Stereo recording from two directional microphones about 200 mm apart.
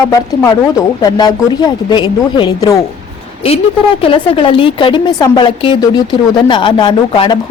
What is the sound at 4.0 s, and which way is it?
Speech, 25° left (ahead or behind).